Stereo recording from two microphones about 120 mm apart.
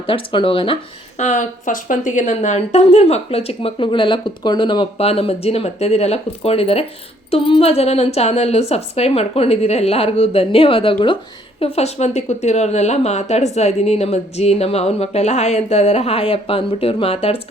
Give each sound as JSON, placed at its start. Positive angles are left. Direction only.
{"t": 0.0, "sound": "speech", "side_deg": 50}
{"t": 1.2, "sound": "speech", "side_deg": 90}
{"t": 4.9, "sound": "speech", "side_deg": 55}
{"t": 11.6, "sound": "speech", "side_deg": 60}